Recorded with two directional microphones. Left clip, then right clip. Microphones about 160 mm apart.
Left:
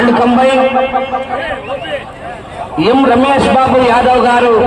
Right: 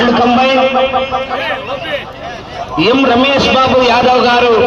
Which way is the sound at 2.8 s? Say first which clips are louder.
Left 1 dB; 40° right (ahead or behind).